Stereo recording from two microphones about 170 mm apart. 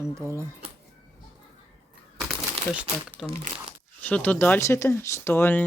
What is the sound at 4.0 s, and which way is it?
Speech, 10° left (ahead or behind).